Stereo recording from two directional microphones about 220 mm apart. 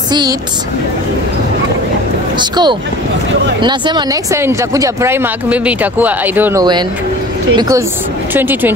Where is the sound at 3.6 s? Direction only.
20° right (ahead or behind).